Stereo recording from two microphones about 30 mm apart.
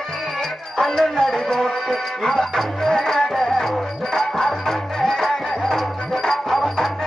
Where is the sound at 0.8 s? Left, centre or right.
Centre.